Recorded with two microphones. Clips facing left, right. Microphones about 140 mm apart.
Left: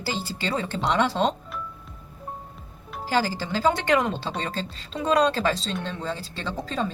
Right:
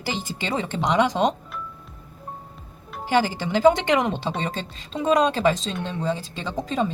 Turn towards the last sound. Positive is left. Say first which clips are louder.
# right 3 dB
turn(degrees=-20)  # may be behind; listen again after turning